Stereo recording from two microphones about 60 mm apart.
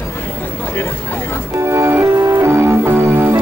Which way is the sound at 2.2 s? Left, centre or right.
Right.